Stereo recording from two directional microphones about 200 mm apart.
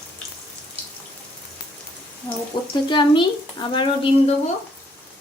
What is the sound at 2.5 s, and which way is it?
A woman's voice, 20° left (ahead or behind).